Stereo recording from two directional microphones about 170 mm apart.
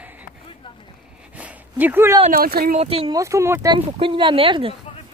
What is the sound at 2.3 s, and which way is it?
Speech, 60° right (ahead or behind).